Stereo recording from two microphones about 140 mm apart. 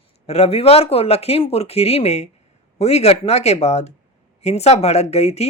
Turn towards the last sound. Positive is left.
turn(degrees=50)  # may be behind; listen again after turning